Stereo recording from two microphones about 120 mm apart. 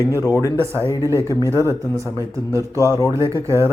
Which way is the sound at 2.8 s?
25° left (ahead or behind).